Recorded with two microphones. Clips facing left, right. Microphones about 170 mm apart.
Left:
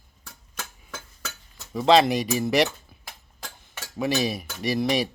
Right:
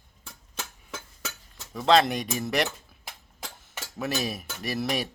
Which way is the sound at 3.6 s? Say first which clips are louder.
Left 5 dB; centre (ahead or behind).